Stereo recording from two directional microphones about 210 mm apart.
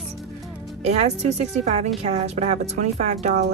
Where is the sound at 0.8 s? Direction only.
30° right (ahead or behind).